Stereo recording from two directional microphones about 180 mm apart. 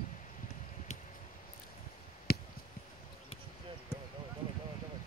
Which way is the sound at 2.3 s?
60° left (ahead or behind).